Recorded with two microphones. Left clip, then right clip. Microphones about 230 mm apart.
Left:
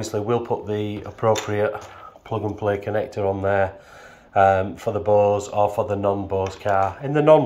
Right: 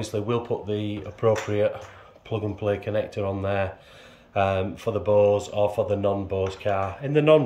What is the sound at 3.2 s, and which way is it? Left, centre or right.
Speech, left.